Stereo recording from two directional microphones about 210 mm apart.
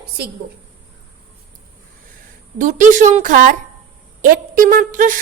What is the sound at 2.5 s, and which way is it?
A woman's voice, 35° right (ahead or behind).